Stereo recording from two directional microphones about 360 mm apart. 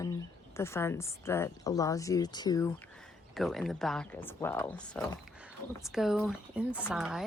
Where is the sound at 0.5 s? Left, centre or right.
Centre.